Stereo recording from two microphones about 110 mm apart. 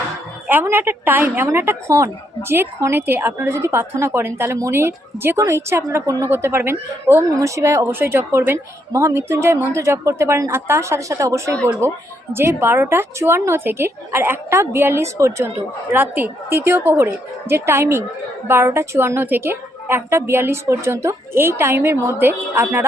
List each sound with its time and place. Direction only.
0.4 s speech: 20° right (ahead or behind)